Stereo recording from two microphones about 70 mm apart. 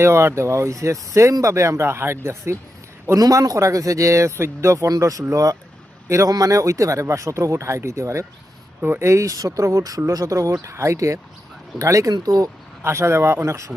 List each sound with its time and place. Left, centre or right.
0.0 s speech: right
3.2 s speech: right
4.9 s speech: right
6.1 s speech: right
8.8 s speech: right
12.8 s speech: right